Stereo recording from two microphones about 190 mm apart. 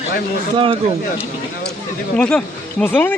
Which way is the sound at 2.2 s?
5° left (ahead or behind).